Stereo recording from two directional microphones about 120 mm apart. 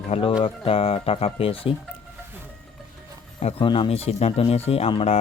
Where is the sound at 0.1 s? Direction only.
50° left (ahead or behind).